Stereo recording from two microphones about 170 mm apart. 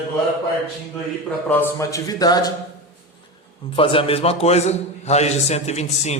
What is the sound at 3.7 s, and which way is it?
A man's voice, 35° left (ahead or behind).